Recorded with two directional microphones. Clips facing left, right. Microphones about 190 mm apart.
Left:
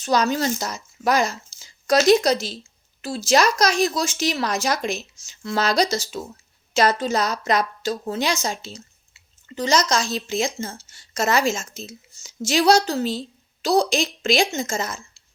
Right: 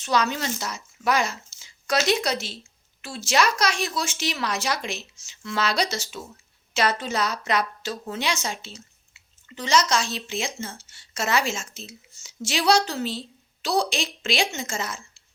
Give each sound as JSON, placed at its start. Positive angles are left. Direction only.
{"t": 0.0, "sound": "a woman's voice", "side_deg": 40}